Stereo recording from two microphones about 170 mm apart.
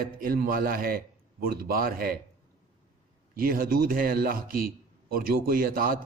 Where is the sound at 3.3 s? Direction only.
60° right (ahead or behind).